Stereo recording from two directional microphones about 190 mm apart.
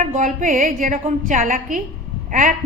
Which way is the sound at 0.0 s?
40° right (ahead or behind).